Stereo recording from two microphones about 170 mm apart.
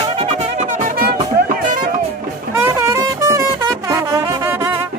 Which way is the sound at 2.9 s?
20° right (ahead or behind).